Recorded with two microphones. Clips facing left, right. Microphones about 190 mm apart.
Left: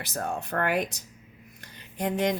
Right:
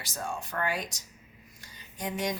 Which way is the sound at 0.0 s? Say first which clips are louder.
Left 5 dB; 60° left (ahead or behind).